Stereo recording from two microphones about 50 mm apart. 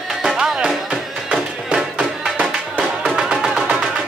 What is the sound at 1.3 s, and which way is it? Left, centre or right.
Music, centre.